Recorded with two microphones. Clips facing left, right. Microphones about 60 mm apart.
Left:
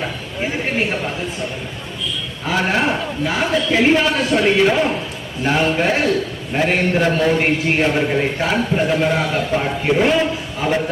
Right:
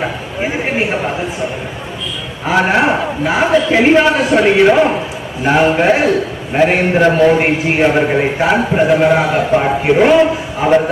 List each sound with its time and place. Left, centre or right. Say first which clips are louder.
0.0 s a sound: right 5 dB; right
2.5 s a man's voice: right 6 dB; right
6.5 s a man's voice: right 5 dB; right
8.4 s a man's voice: right 6 dB; right